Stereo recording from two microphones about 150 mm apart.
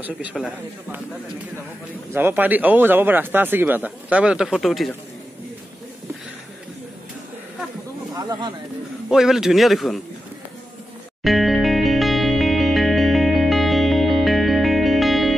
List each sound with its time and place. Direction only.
0.0 s speech: 5° right (ahead or behind)
2.1 s speech: 15° right (ahead or behind)
8.1 s speech: 25° right (ahead or behind)
9.1 s a man's voice: 5° right (ahead or behind)
11.2 s music: centre (ahead or behind)